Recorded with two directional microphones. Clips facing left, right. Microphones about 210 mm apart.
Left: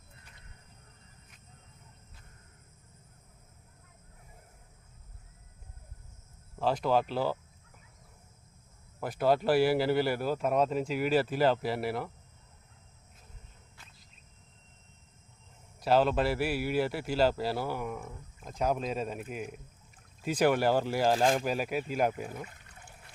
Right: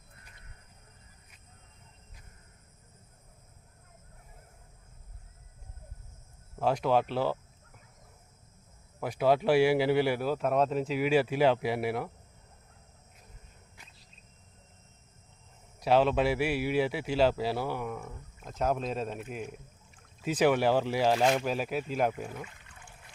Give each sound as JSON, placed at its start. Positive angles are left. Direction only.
{"t": 6.6, "sound": "speech", "side_deg": 0}
{"t": 9.0, "sound": "speech", "side_deg": -5}
{"t": 15.8, "sound": "speech", "side_deg": 5}
{"t": 22.4, "sound": "pour", "side_deg": 40}